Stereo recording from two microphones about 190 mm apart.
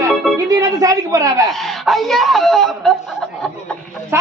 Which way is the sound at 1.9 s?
Centre (ahead or behind).